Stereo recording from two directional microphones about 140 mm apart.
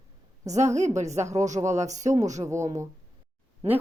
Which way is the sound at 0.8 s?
55° right (ahead or behind).